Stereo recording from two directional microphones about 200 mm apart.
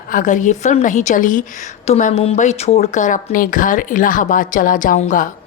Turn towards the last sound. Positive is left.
turn(degrees=40)  # may be behind; listen again after turning